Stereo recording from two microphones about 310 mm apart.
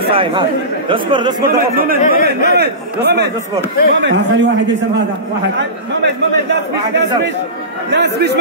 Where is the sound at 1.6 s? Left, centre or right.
Right.